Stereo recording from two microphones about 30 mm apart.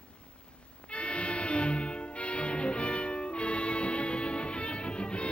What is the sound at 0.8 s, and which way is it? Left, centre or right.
Music, left.